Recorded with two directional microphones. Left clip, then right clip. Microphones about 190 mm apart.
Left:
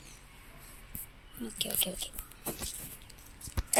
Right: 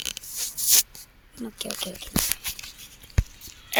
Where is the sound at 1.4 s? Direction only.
30° right (ahead or behind).